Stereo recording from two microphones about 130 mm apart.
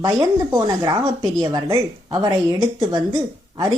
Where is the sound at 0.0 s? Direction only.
30° right (ahead or behind).